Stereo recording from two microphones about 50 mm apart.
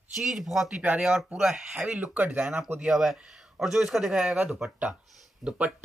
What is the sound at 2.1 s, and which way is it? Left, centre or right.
Speech, right.